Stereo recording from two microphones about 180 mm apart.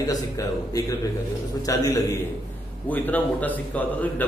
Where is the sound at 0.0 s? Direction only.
20° left (ahead or behind).